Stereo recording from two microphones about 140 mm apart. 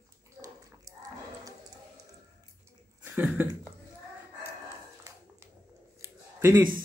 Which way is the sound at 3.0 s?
10° right (ahead or behind).